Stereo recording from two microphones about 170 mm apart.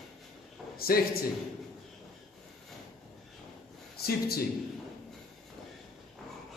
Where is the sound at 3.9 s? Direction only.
65° left (ahead or behind).